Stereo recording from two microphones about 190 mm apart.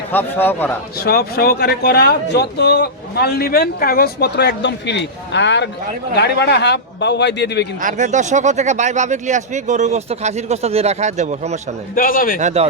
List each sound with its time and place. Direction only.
0.1 s a man's voice: 10° left (ahead or behind)
0.9 s speech: 55° left (ahead or behind)
7.8 s speech: 40° right (ahead or behind)
11.9 s a man's voice: 50° left (ahead or behind)
12.4 s speech: 40° right (ahead or behind)